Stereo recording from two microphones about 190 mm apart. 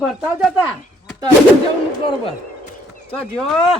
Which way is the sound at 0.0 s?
5° right (ahead or behind).